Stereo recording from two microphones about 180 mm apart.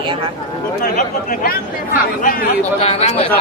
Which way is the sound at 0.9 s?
45° left (ahead or behind).